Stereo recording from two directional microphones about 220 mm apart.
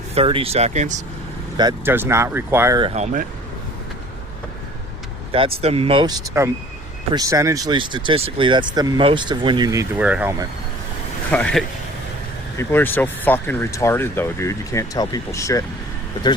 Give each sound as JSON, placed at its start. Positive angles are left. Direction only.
{"t": 0.1, "sound": "speech", "side_deg": -25}
{"t": 1.5, "sound": "speech", "side_deg": -15}
{"t": 2.9, "sound": "speech", "side_deg": -35}
{"t": 5.3, "sound": "speech", "side_deg": -25}
{"t": 11.3, "sound": "a man's voice", "side_deg": 5}